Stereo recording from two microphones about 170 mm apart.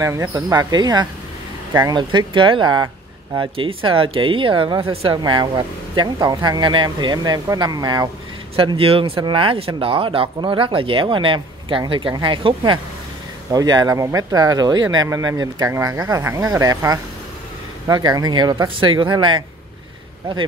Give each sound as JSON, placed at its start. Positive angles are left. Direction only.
{"t": 0.0, "sound": "speech", "side_deg": -15}